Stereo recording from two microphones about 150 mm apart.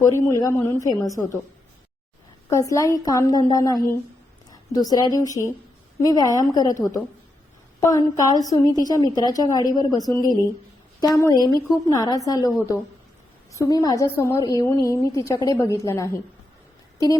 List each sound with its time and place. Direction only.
0.0 s a woman's voice: 20° left (ahead or behind)
2.5 s a woman's voice: 20° left (ahead or behind)